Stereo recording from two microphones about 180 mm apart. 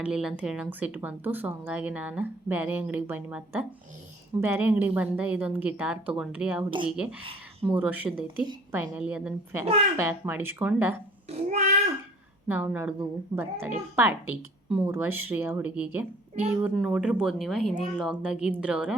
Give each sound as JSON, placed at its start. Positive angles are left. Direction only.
{"t": 0.0, "sound": "speech", "side_deg": -5}
{"t": 11.3, "sound": "a child's voice", "side_deg": -40}
{"t": 12.5, "sound": "speech", "side_deg": -10}